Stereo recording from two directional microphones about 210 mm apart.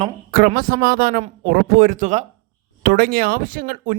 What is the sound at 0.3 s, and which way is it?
A man's voice, 40° right (ahead or behind).